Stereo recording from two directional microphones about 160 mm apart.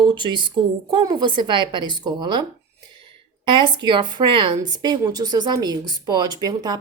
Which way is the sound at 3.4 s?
30° right (ahead or behind).